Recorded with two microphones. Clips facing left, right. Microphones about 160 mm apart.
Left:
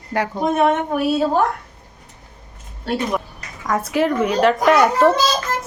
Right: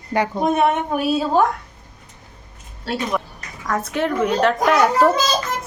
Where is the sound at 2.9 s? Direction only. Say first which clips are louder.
Left 2 dB; 10° left (ahead or behind).